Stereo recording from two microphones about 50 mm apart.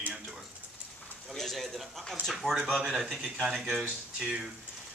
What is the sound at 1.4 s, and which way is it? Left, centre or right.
Speech, centre.